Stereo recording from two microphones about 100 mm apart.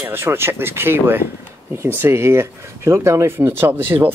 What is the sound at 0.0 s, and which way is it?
Speech, 25° right (ahead or behind).